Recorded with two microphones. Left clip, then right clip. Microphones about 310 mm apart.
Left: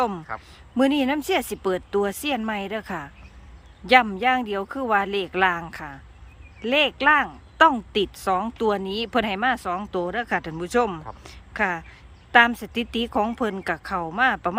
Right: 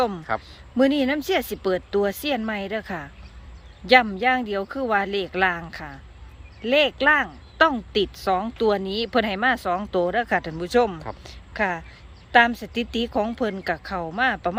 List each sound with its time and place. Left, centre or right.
0.3 s a man's voice: right
0.8 s speech: centre